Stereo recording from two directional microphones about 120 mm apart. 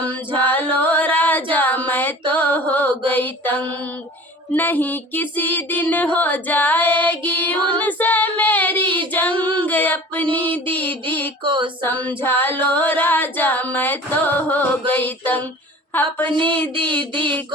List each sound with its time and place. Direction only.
0.3 s female singing: 15° left (ahead or behind)
2.3 s mantra: 15° left (ahead or behind)
4.5 s female singing: 15° left (ahead or behind)
11.4 s female singing: 45° right (ahead or behind)
11.8 s female singing: 15° left (ahead or behind)